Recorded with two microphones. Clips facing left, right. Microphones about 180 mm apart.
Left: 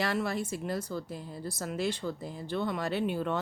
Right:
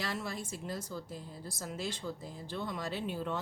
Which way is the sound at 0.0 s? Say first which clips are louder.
Left 8 dB; 65° left (ahead or behind).